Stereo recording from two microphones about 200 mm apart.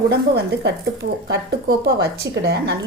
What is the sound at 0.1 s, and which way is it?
Speech, 55° right (ahead or behind).